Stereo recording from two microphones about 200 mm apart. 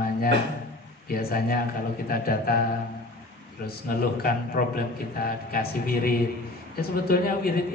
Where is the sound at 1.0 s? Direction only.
50° left (ahead or behind).